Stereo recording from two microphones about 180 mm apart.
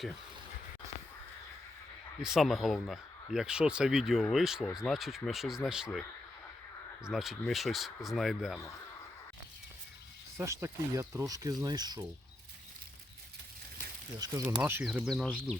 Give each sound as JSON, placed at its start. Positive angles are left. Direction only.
{"t": 2.2, "sound": "speech", "side_deg": 0}
{"t": 7.0, "sound": "speech", "side_deg": 0}
{"t": 10.3, "sound": "speech", "side_deg": -15}
{"t": 14.2, "sound": "speech", "side_deg": -20}
{"t": 14.6, "sound": "speech", "side_deg": -10}